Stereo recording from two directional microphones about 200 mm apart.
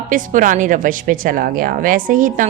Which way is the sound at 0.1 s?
40° right (ahead or behind).